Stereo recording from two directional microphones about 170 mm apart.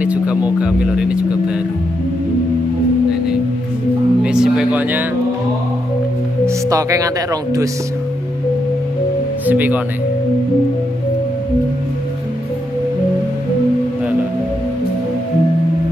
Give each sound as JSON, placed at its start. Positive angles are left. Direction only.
{"t": 0.0, "sound": "speech", "side_deg": -10}
{"t": 4.2, "sound": "music", "side_deg": -5}
{"t": 6.4, "sound": "music", "side_deg": -20}
{"t": 9.5, "sound": "speech", "side_deg": -10}